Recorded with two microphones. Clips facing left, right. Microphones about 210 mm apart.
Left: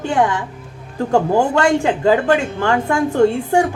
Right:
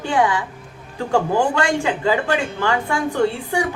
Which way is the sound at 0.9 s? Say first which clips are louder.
Left 3 dB; 45° left (ahead or behind).